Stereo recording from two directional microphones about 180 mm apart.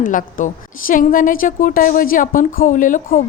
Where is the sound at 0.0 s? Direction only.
50° left (ahead or behind).